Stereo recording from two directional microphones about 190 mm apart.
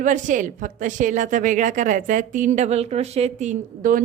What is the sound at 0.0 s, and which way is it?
A woman's voice, 40° right (ahead or behind).